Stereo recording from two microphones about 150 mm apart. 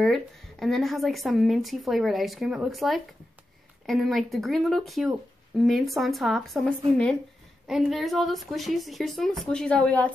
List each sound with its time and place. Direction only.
0.0 s speech: centre (ahead or behind)